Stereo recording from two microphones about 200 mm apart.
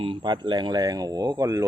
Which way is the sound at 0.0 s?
25° right (ahead or behind).